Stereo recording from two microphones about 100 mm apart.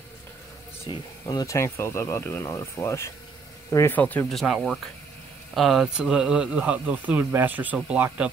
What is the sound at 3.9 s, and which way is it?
Speech, 15° left (ahead or behind).